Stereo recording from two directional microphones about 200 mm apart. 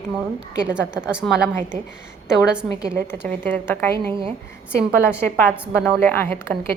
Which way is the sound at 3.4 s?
10° left (ahead or behind).